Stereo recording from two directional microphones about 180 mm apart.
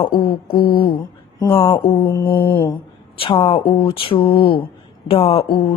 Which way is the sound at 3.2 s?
30° left (ahead or behind).